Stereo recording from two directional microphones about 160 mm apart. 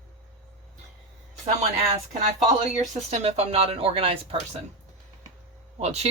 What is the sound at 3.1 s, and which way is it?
Speech, 40° right (ahead or behind).